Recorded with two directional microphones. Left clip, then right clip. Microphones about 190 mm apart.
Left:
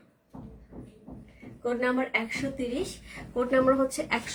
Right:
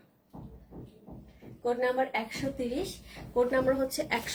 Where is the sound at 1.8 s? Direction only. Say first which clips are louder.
Left 2 dB; 20° left (ahead or behind).